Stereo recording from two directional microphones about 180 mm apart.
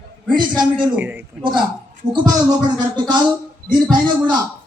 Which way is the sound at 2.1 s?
20° right (ahead or behind).